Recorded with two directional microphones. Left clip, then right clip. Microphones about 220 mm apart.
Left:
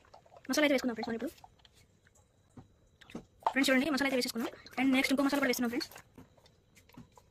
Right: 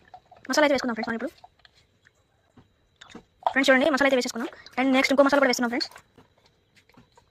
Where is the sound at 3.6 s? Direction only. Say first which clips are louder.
Right 11 dB; 5° left (ahead or behind).